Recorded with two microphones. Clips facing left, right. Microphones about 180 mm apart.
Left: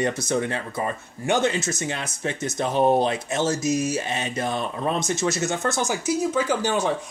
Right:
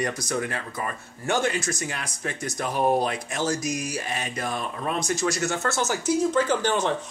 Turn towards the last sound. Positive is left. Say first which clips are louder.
# left 1 dB
turn(degrees=10)  # may be behind; listen again after turning